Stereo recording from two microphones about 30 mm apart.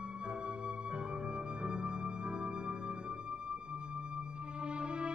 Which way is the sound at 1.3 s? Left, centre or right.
Right.